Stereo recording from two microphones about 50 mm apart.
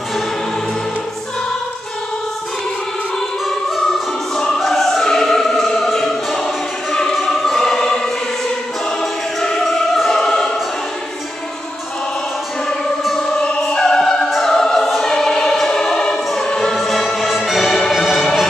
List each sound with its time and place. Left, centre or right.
4.6 s music: centre
6.4 s choir: centre
9.4 s music: centre
13.3 s choir: left
13.7 s opera: centre
14.9 s music: centre